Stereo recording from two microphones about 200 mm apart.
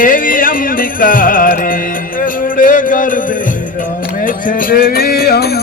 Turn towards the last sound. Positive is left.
turn(degrees=50)  # may be behind; listen again after turning